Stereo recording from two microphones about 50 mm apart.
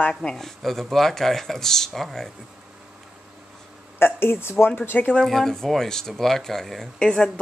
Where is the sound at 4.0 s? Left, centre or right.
Left.